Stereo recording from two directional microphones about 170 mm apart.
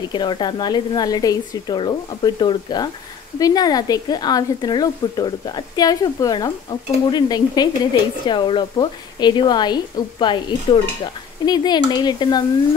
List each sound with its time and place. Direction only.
0.1 s speech: 25° left (ahead or behind)